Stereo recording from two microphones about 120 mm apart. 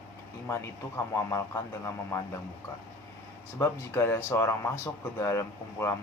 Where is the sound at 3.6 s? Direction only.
20° left (ahead or behind).